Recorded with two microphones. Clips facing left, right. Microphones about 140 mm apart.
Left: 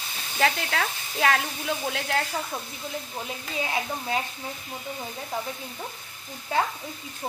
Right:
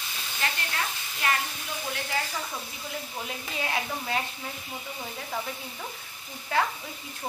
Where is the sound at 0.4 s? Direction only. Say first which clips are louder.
Left 7 dB; 90° left.